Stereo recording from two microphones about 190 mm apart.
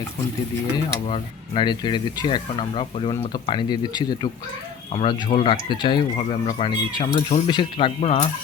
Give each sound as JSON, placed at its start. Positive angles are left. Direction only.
{"t": 1.0, "sound": "speech", "side_deg": 25}
{"t": 5.3, "sound": "speech", "side_deg": 25}
{"t": 7.4, "sound": "speech", "side_deg": 25}